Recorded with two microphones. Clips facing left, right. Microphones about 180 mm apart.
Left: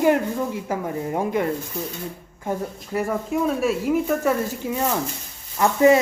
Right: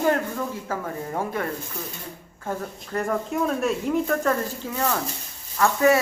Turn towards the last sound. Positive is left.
turn(degrees=20)  # may be behind; listen again after turning